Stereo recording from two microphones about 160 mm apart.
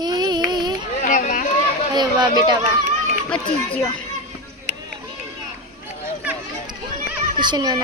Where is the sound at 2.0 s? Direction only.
25° right (ahead or behind).